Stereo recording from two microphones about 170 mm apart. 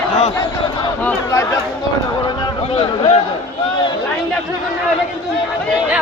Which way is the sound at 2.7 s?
35° left (ahead or behind).